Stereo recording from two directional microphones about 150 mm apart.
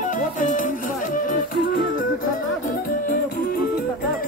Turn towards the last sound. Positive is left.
turn(degrees=65)  # may be behind; listen again after turning